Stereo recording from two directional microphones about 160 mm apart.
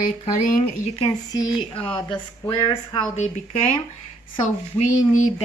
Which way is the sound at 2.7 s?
45° left (ahead or behind).